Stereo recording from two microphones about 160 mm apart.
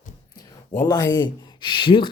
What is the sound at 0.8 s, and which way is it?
Speech, 25° left (ahead or behind).